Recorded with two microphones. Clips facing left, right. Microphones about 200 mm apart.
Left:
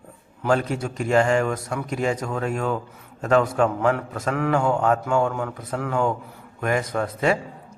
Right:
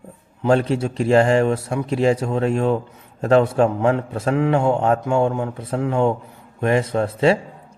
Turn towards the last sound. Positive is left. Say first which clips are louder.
# right 5 dB
turn(degrees=-30)  # may be behind; listen again after turning